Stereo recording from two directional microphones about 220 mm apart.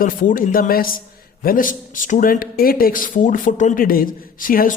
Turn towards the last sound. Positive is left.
turn(degrees=40)  # may be behind; listen again after turning